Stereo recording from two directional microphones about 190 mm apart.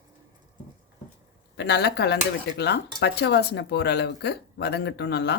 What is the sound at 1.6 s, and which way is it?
A woman's voice, 60° left (ahead or behind).